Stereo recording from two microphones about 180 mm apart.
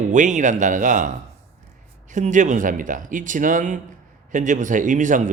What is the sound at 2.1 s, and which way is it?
A man's voice, 45° right (ahead or behind).